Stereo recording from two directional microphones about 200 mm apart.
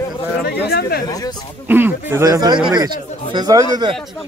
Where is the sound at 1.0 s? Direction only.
20° left (ahead or behind).